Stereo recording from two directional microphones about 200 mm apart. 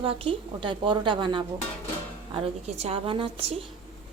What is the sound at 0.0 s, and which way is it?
A woman's voice, 30° right (ahead or behind).